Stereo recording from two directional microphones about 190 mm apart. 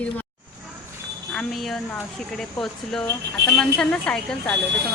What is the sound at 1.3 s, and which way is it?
Speech, centre (ahead or behind).